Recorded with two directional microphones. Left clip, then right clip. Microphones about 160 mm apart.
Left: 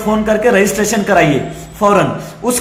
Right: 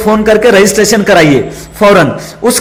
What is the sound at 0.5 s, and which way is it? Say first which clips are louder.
Speech: right 6 dB; 30° right (ahead or behind).